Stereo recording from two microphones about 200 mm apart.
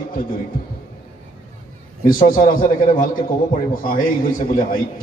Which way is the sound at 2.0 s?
45° left (ahead or behind).